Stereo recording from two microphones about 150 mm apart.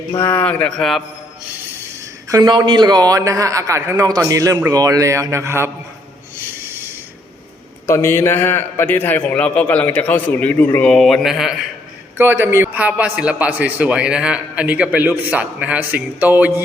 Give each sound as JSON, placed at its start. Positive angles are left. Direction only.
{"t": 0.1, "sound": "a man's voice", "side_deg": 20}
{"t": 2.3, "sound": "a man's voice", "side_deg": -30}
{"t": 7.9, "sound": "a man's voice", "side_deg": 15}
{"t": 12.1, "sound": "a man's voice", "side_deg": -15}